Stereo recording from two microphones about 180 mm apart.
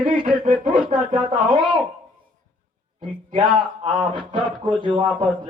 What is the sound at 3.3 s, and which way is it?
A man's voice, 30° right (ahead or behind).